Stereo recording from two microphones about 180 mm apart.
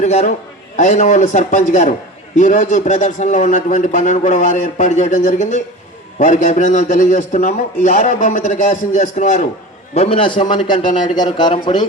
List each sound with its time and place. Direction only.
0.0 s a man's voice: 40° left (ahead or behind)